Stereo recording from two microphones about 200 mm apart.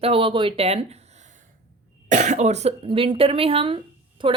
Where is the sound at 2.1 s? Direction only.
35° right (ahead or behind).